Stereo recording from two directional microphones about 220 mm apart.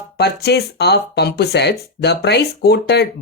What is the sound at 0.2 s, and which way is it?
Speech, 50° left (ahead or behind).